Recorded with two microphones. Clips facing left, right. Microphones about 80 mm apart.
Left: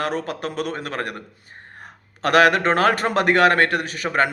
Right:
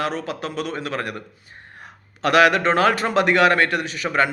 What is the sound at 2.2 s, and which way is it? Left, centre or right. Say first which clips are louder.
A man's voice: even; left.